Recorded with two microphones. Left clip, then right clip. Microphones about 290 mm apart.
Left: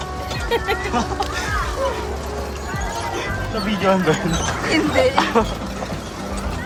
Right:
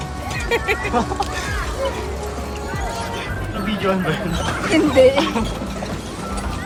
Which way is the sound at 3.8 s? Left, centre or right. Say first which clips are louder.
Left 4 dB; left.